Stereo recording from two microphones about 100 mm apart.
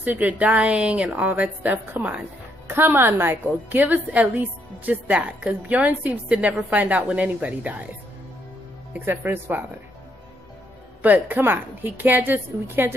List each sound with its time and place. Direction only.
0.0 s a woman's voice: 15° right (ahead or behind)
8.9 s a woman's voice: 20° right (ahead or behind)
11.0 s a woman's voice: 15° right (ahead or behind)